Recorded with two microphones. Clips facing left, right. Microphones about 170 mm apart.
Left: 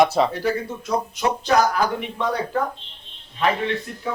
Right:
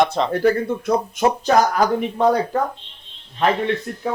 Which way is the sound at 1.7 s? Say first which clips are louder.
Right 4 dB; 45° right (ahead or behind).